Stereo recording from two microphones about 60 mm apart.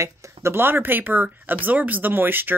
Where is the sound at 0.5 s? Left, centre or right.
Right.